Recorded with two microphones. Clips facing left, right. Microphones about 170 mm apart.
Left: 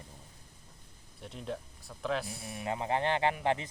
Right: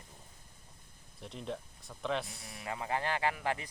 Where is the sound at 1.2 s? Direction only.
Centre (ahead or behind).